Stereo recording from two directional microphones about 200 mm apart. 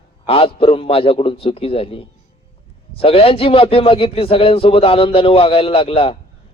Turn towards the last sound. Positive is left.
turn(degrees=30)  # may be behind; listen again after turning